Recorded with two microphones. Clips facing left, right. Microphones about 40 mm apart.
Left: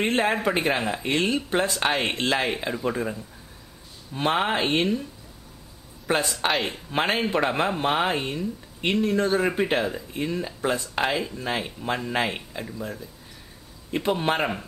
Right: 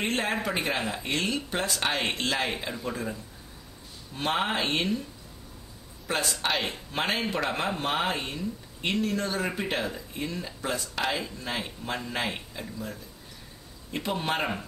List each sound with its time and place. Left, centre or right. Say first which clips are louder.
0.0 s speech: left 6 dB; centre
2.4 s speech: left 5 dB; centre
6.1 s speech: left 6 dB; centre
6.5 s speech: left 3 dB; centre
6.9 s speech: left 6 dB; centre